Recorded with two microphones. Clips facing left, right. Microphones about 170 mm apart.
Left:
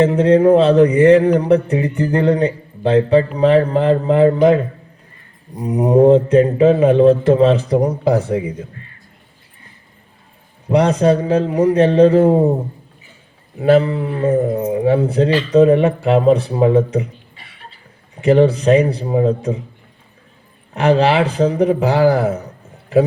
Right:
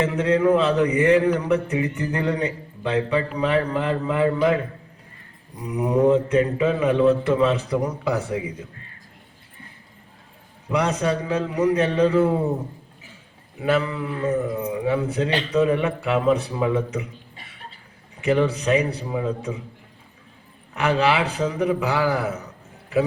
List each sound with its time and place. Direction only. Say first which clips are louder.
0.0 s speech: left 8 dB; 35° left (ahead or behind)
10.7 s speech: left 9 dB; 35° left (ahead or behind)
13.6 s speech: left 9 dB; 35° left (ahead or behind)
18.2 s speech: left 8 dB; 35° left (ahead or behind)
20.7 s speech: left 7 dB; 35° left (ahead or behind)